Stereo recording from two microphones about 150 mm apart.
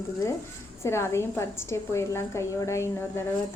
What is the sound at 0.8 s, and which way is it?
A woman's voice, 15° left (ahead or behind).